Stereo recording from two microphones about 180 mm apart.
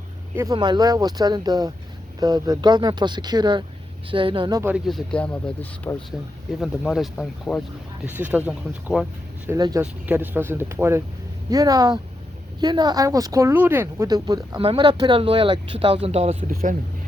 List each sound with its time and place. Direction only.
0.3 s speech: 20° right (ahead or behind)
4.7 s speech: centre (ahead or behind)
8.0 s speech: 10° right (ahead or behind)
9.5 s speech: 20° right (ahead or behind); by 16.5 s 35° right (ahead or behind)
16.5 s speech: 55° right (ahead or behind)